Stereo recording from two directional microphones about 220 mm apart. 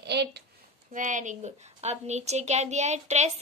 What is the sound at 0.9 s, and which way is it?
A child's voice, 35° right (ahead or behind).